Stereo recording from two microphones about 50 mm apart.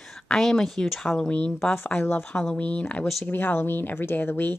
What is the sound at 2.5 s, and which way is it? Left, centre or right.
Speech, left.